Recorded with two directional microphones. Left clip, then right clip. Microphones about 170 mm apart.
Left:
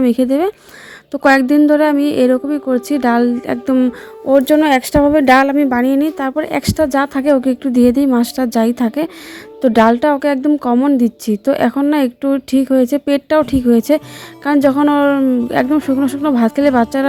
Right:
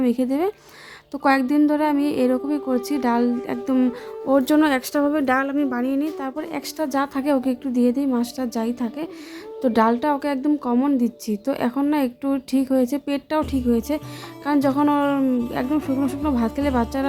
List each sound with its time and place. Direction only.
0.0 s a woman's voice: 30° left (ahead or behind)
3.8 s a woman's voice: 15° left (ahead or behind)
5.2 s a woman's voice: 35° left (ahead or behind)
9.6 s a woman's voice: 30° left (ahead or behind)